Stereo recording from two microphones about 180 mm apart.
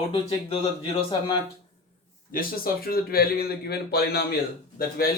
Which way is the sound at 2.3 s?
55° left (ahead or behind).